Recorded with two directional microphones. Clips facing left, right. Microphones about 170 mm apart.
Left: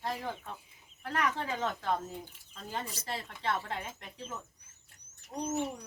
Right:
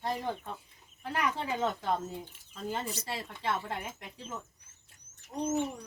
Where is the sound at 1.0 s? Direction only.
15° right (ahead or behind).